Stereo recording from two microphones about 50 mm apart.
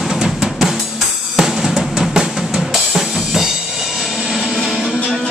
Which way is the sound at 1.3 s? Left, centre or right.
Centre.